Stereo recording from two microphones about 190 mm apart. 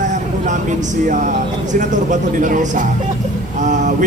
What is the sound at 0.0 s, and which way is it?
Vehicle, 40° right (ahead or behind).